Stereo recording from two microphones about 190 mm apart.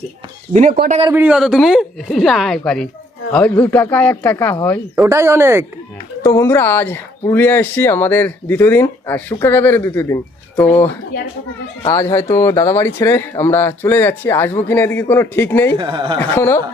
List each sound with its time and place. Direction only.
0.5 s speech: 35° right (ahead or behind)
1.1 s speech: 5° right (ahead or behind); by 4.5 s 10° left (ahead or behind)
4.9 s speech: 15° right (ahead or behind)
6.2 s speech: 15° left (ahead or behind)
15.8 s a man's voice: 25° right (ahead or behind)
16.3 s speech: 10° left (ahead or behind)